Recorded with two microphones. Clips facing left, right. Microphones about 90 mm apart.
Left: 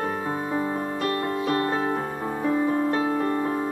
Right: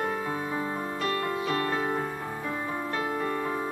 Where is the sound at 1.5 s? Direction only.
35° left (ahead or behind).